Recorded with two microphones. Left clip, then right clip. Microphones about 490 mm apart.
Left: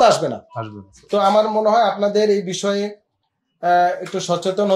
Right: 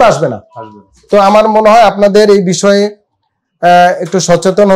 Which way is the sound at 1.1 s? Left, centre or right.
Right.